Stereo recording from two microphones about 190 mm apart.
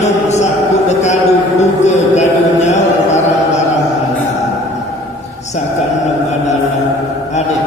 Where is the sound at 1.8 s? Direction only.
35° left (ahead or behind).